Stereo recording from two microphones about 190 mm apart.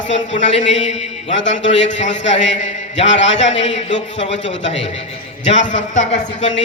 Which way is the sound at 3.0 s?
75° left (ahead or behind).